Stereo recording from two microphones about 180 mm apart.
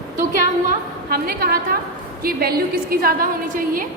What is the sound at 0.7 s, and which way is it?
A woman's voice, 55° right (ahead or behind).